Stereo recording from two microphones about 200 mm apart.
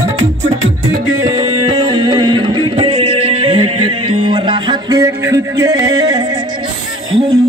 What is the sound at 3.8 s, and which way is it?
Music, 90° right.